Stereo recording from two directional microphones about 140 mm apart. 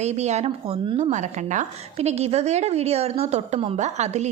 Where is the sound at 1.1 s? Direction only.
60° right (ahead or behind).